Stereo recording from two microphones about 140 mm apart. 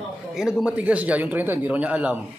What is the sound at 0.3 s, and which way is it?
Speech, 5° right (ahead or behind).